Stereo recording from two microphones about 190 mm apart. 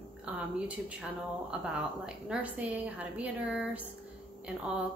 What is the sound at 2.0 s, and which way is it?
A woman's voice, 5° right (ahead or behind).